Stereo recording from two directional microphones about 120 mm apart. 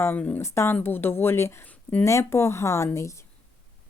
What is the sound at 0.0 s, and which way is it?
Speech, 15° left (ahead or behind).